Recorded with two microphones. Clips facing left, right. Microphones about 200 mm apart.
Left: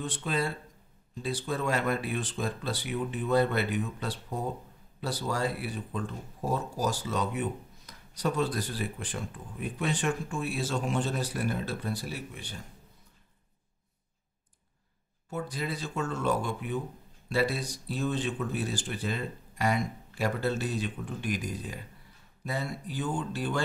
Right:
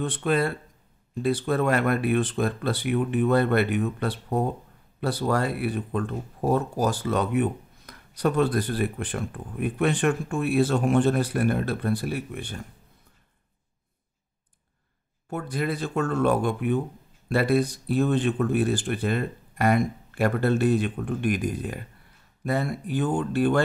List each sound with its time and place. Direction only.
0.0 s speech: 60° right (ahead or behind)
15.2 s speech: 60° right (ahead or behind)